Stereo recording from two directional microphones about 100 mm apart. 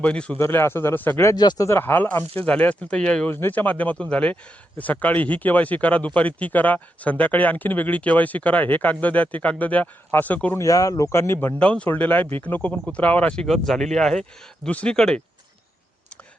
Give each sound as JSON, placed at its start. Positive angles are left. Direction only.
{"t": 0.0, "sound": "speech", "side_deg": 10}
{"t": 0.3, "sound": "speech", "side_deg": 25}
{"t": 1.4, "sound": "speech", "side_deg": 45}
{"t": 1.6, "sound": "speech", "side_deg": 25}
{"t": 10.6, "sound": "speech", "side_deg": 35}
{"t": 11.6, "sound": "speech", "side_deg": 10}